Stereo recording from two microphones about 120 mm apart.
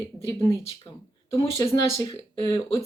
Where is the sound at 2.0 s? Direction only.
35° left (ahead or behind).